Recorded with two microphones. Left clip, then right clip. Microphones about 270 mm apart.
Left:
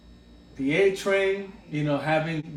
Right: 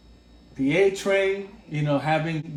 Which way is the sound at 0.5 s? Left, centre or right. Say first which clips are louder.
Right 1 dB; right.